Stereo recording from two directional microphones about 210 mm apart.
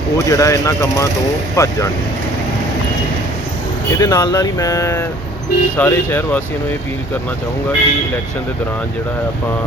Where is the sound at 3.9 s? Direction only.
15° left (ahead or behind).